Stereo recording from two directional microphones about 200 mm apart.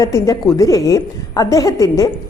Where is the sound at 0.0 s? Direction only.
15° left (ahead or behind).